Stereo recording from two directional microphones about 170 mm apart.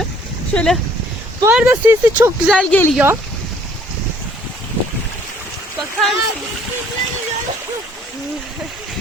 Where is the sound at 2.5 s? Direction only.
5° left (ahead or behind).